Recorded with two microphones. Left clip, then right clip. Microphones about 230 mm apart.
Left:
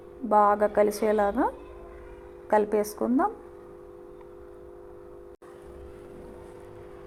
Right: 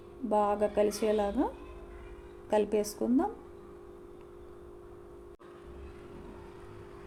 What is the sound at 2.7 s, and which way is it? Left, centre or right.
Speech, centre.